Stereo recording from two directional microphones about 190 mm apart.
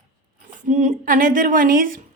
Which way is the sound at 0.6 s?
40° right (ahead or behind).